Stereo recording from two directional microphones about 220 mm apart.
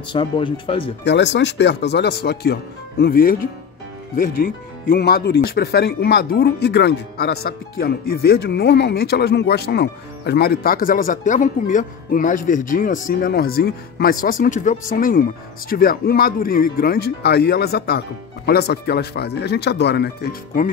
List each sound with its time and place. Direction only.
0.1 s speech: 25° left (ahead or behind)
1.0 s speech: 50° left (ahead or behind)